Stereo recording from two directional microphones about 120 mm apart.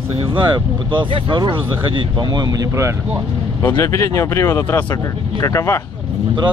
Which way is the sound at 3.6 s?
25° left (ahead or behind).